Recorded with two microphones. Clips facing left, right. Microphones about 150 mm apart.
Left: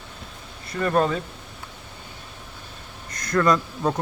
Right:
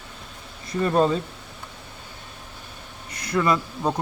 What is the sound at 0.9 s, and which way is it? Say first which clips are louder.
Speech: right 1 dB; 30° right (ahead or behind).